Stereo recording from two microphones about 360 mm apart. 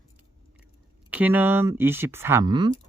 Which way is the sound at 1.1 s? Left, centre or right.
Centre.